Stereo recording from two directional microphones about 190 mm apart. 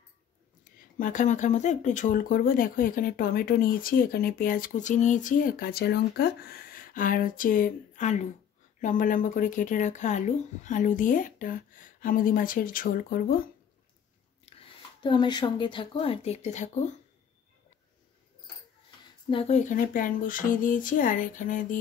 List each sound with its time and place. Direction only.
0.9 s speech: 45° left (ahead or behind)
14.4 s speech: 25° left (ahead or behind)
19.2 s speech: 30° left (ahead or behind)